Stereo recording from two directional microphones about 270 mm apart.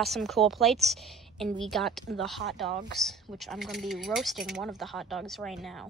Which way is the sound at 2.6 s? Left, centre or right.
Right.